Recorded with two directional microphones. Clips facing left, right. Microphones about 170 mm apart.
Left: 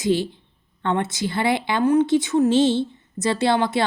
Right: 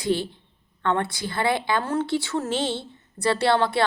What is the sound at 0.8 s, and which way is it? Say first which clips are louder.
A woman's voice: left 2 dB; 20° left (ahead or behind).